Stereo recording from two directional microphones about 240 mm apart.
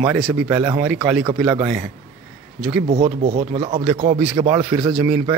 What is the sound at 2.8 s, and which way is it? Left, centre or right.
Speech, right.